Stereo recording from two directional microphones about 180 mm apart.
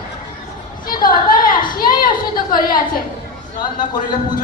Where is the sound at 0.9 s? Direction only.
50° left (ahead or behind).